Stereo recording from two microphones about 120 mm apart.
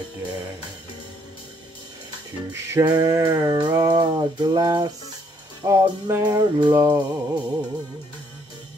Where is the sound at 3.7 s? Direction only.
30° right (ahead or behind).